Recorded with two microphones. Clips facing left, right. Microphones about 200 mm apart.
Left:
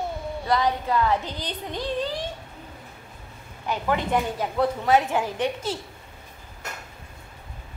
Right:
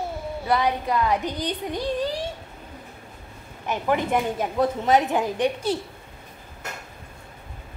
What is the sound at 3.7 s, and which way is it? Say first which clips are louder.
Speech: right 1 dB; 15° right (ahead or behind).